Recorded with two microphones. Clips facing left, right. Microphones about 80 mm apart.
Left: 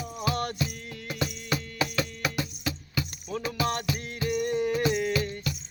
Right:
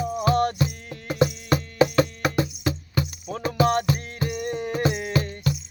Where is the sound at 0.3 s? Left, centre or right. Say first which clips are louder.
Right 7 dB; right.